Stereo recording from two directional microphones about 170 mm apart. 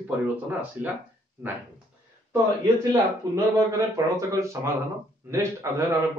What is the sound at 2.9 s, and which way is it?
A man's voice, 20° right (ahead or behind).